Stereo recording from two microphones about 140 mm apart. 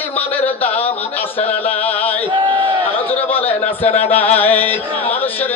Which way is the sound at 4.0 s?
15° left (ahead or behind).